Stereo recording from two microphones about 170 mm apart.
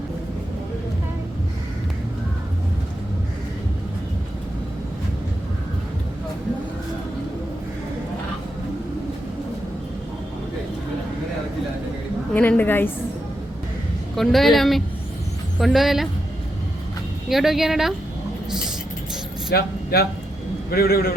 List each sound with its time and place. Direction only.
12.3 s a woman's voice: 10° left (ahead or behind)
14.2 s speech: centre (ahead or behind)
17.2 s speech: centre (ahead or behind)
19.5 s a man's voice: 70° left (ahead or behind)